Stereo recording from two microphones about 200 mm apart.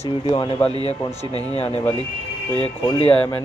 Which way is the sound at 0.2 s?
25° left (ahead or behind).